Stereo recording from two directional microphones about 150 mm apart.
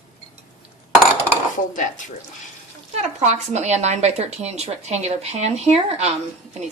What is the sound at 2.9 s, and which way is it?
Speech, 50° right (ahead or behind).